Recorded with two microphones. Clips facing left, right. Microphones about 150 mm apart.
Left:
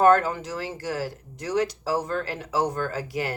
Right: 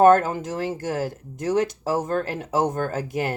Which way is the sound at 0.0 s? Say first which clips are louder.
Right 3 dB; 45° right (ahead or behind).